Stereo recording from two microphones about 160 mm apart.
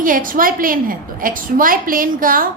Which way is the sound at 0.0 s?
60° right (ahead or behind).